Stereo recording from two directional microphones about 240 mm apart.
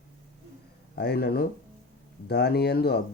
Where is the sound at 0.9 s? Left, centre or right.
Left.